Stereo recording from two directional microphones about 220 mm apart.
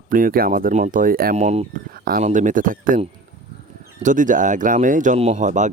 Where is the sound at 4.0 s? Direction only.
35° right (ahead or behind).